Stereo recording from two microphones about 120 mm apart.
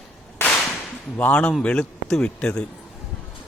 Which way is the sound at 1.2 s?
10° left (ahead or behind).